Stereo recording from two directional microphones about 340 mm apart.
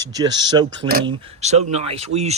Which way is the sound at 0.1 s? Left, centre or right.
Centre.